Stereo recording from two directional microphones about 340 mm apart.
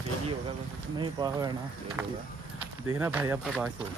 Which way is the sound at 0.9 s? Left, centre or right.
Centre.